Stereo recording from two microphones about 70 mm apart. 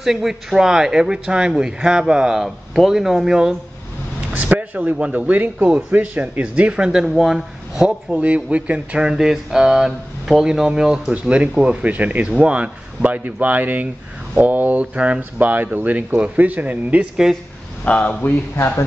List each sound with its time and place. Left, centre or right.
0.0 s speech: centre
4.3 s a man's voice: right; by 8.2 s centre
8.2 s speech: centre
17.8 s speech: centre